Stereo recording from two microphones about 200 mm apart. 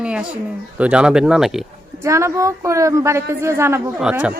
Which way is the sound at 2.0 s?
15° right (ahead or behind).